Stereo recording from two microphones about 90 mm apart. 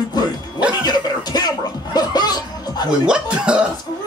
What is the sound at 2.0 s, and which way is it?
Chuckle, 50° left (ahead or behind).